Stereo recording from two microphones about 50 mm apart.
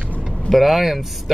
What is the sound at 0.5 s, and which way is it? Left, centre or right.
Speech, centre.